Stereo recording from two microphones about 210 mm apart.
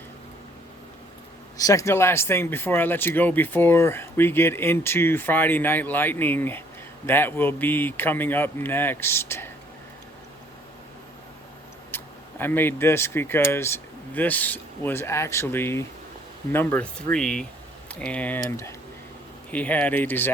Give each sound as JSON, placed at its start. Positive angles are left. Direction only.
{"t": 1.5, "sound": "speech", "side_deg": 15}
{"t": 11.9, "sound": "speech", "side_deg": 10}